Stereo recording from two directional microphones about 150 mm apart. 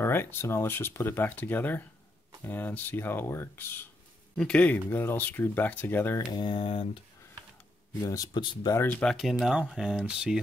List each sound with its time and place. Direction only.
0.0 s speech: 15° left (ahead or behind)
6.3 s speech: 35° left (ahead or behind)
8.0 s speech: 25° left (ahead or behind)
8.7 s speech: 10° left (ahead or behind)
9.1 s speech: centre (ahead or behind)